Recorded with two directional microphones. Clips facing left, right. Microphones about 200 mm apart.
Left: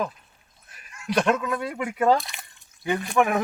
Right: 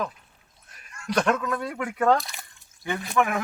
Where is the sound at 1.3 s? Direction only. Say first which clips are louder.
Left 1 dB; 10° left (ahead or behind).